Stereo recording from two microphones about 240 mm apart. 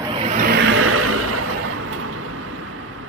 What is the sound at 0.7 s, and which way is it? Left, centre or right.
Vehicle, right.